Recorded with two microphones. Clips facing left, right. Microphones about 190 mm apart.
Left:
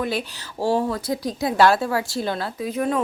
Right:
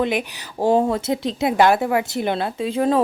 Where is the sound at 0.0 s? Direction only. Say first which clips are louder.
Right 4 dB; 20° right (ahead or behind).